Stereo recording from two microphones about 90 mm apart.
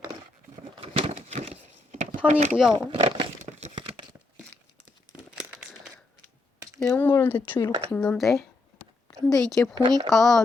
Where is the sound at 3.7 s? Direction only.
70° right (ahead or behind).